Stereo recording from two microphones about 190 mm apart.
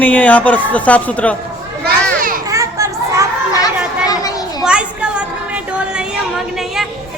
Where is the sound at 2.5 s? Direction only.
15° right (ahead or behind).